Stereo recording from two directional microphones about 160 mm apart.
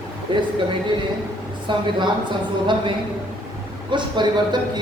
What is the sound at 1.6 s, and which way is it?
Speech, 30° right (ahead or behind).